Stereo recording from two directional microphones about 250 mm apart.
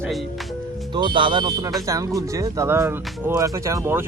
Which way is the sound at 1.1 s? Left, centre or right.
Centre.